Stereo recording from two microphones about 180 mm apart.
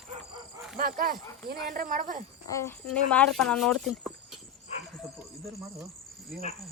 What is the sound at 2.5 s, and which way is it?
Speech, 15° left (ahead or behind).